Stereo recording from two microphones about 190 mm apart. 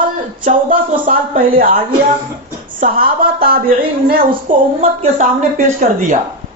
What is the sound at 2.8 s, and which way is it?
A woman's voice, 50° right (ahead or behind).